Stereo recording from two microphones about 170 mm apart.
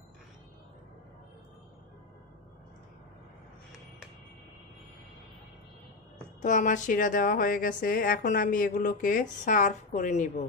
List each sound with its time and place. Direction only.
6.4 s a woman's voice: 50° left (ahead or behind)